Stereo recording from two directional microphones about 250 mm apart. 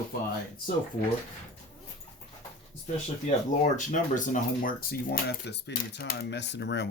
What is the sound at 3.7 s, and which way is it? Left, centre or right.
Speech, left.